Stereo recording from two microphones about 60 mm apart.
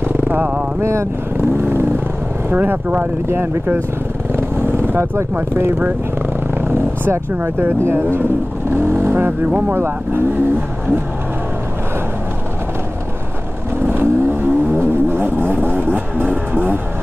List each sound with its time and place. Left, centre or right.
0.2 s vehicle: right
0.7 s speech: right
1.6 s vehicle: right
2.5 s speech: right
13.8 s vehicle: right